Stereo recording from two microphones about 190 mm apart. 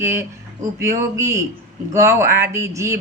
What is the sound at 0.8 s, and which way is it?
Speech, 15° right (ahead or behind).